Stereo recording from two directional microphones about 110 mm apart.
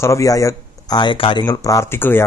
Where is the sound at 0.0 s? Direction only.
30° left (ahead or behind).